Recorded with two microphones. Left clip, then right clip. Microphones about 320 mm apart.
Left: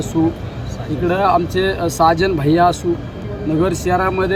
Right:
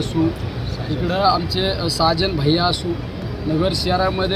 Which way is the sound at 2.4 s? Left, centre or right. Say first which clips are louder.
Left 6 dB; centre.